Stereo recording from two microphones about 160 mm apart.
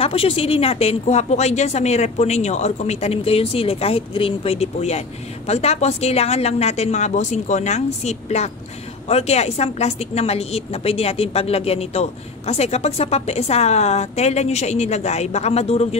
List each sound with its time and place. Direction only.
0.0 s a woman's voice: 35° left (ahead or behind)